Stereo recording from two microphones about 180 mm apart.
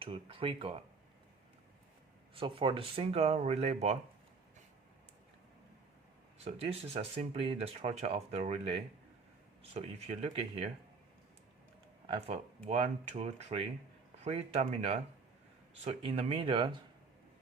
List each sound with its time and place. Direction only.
0.0 s speech: 30° right (ahead or behind)
2.3 s speech: 30° right (ahead or behind)
6.4 s speech: 35° right (ahead or behind)
12.0 s speech: 30° right (ahead or behind)